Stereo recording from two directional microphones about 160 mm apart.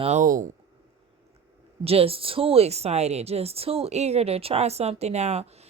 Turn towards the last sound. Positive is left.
turn(degrees=-40)  # may be behind; listen again after turning